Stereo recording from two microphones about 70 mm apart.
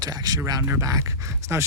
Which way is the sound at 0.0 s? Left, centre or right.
Right.